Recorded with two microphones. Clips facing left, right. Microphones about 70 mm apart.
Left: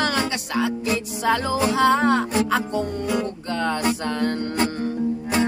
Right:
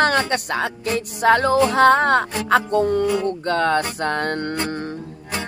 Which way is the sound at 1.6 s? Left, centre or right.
Right.